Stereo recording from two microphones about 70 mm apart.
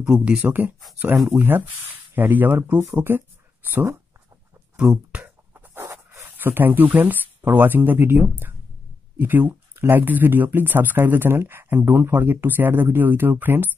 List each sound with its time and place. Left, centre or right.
0.0 s speech: centre; by 3.8 s right
5.1 s writing: right
5.8 s dog: right
6.3 s speech: right